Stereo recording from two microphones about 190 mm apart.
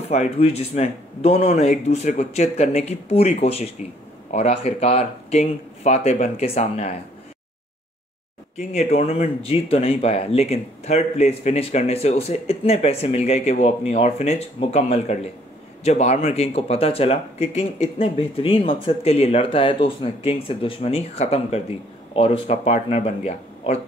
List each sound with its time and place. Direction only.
0.1 s speech: 35° left (ahead or behind)
8.5 s speech: 35° left (ahead or behind)